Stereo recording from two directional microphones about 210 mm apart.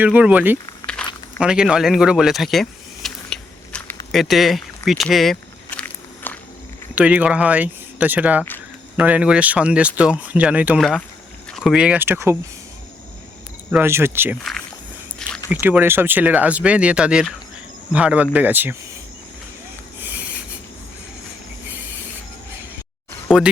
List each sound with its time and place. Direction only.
0.0 s speech: 5° right (ahead or behind)
0.8 s a sound: 15° left (ahead or behind)
1.4 s vehicle: 5° right (ahead or behind)
4.1 s speech: centre (ahead or behind)
6.3 s walk: 10° left (ahead or behind)
6.9 s speech: 5° right (ahead or behind)
13.8 s speech: 10° right (ahead or behind)
15.2 s a sound: 5° left (ahead or behind)
15.6 s speech: 10° right (ahead or behind)
20.0 s a sound: 10° right (ahead or behind)
23.3 s speech: 5° right (ahead or behind)